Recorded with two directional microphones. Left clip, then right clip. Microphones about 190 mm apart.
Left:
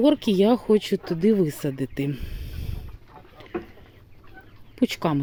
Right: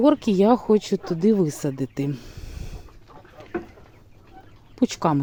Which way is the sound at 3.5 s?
55° right (ahead or behind).